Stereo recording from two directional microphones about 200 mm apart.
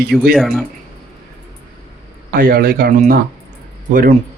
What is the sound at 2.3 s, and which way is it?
Speech, 45° right (ahead or behind).